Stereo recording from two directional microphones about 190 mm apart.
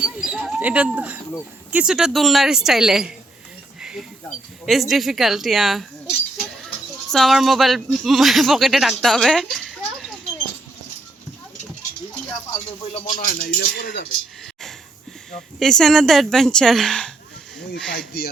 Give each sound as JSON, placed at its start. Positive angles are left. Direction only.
{"t": 0.0, "sound": "a sound", "side_deg": -5}
{"t": 1.7, "sound": "speech", "side_deg": -5}
{"t": 3.8, "sound": "a sound", "side_deg": -5}
{"t": 4.6, "sound": "speech", "side_deg": 0}
{"t": 7.1, "sound": "speech", "side_deg": 0}
{"t": 12.9, "sound": "speech", "side_deg": 45}
{"t": 15.3, "sound": "speech", "side_deg": 5}
{"t": 17.9, "sound": "speech", "side_deg": 55}